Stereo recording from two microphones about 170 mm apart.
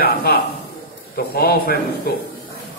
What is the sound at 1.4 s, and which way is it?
Speech, 65° left (ahead or behind).